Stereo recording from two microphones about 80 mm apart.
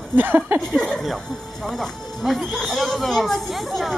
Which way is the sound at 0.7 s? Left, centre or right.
Centre.